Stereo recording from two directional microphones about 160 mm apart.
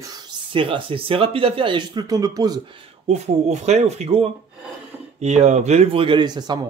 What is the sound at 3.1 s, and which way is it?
Speech, 45° right (ahead or behind).